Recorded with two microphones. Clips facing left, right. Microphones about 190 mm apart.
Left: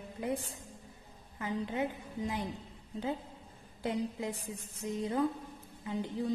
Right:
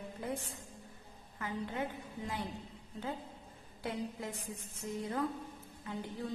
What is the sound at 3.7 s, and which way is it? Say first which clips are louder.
A woman's voice: left 5 dB; 20° left (ahead or behind).